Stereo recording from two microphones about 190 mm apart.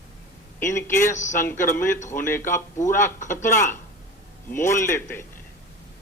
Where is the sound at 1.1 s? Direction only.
40° left (ahead or behind).